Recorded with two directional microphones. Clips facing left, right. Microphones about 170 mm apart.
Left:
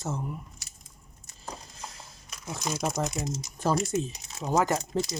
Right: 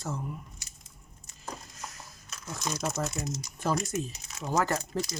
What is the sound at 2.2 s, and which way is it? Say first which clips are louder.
Speech: left 2 dB; 10° left (ahead or behind).